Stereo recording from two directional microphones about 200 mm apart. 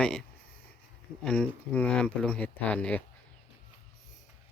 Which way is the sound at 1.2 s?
5° left (ahead or behind).